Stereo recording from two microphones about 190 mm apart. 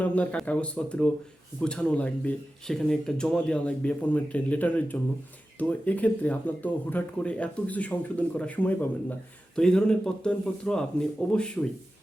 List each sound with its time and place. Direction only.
0.0 s speech: 5° left (ahead or behind)